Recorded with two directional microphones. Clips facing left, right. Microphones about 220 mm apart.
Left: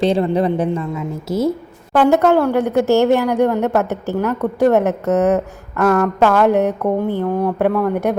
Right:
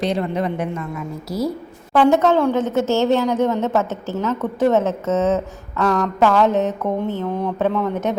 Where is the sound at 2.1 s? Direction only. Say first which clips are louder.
Left 2 dB; 10° left (ahead or behind).